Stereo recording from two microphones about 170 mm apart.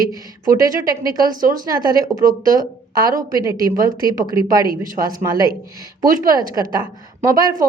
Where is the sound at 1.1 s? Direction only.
55° right (ahead or behind).